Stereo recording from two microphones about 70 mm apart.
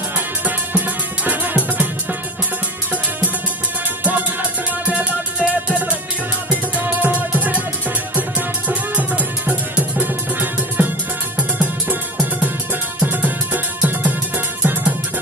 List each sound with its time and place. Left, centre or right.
0.5 s music: right
4.0 s music: right
14.6 s music: right